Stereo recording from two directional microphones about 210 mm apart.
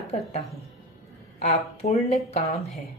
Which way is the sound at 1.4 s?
30° left (ahead or behind).